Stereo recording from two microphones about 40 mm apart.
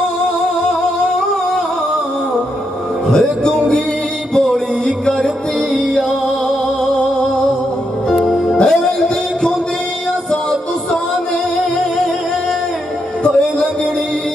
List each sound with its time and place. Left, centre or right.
3.1 s speech: centre
4.3 s music: centre
6.8 s music: left
8.6 s music: centre